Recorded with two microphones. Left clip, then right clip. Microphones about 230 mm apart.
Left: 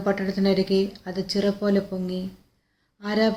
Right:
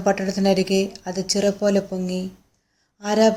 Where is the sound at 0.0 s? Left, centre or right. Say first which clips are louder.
Right 4 dB; centre.